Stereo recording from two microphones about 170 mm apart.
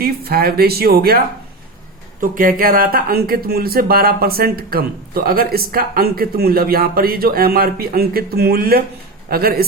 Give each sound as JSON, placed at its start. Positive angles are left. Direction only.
{"t": 0.0, "sound": "speech", "side_deg": -60}
{"t": 2.2, "sound": "speech", "side_deg": -55}